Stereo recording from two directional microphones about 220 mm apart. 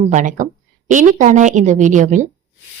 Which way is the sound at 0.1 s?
35° right (ahead or behind).